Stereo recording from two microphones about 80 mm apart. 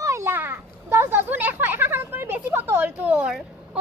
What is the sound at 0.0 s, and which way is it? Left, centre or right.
Children playing, right.